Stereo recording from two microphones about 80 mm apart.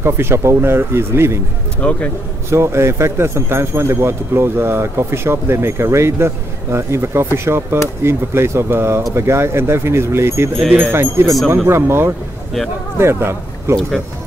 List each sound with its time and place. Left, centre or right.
0.0 s speech: right
1.8 s speech: centre
2.5 s speech: right